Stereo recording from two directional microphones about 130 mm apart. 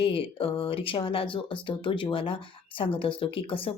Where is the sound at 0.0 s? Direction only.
45° left (ahead or behind).